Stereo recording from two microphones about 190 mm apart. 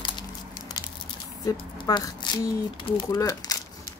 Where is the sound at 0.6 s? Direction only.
20° left (ahead or behind).